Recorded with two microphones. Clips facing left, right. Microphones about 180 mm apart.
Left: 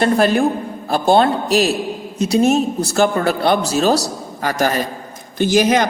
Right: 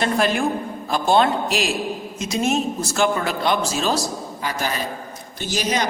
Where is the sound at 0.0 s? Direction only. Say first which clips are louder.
Left 6 dB; 35° left (ahead or behind).